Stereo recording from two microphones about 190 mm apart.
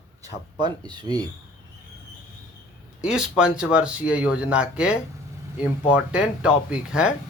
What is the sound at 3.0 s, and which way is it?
Speech, 5° right (ahead or behind).